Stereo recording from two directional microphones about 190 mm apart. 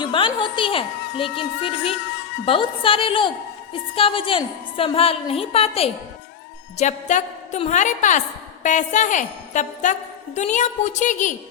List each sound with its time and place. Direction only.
0.0 s a woman's voice: 25° left (ahead or behind)